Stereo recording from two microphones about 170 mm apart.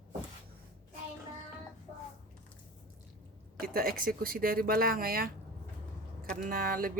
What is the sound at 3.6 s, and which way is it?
Speech, 60° right (ahead or behind).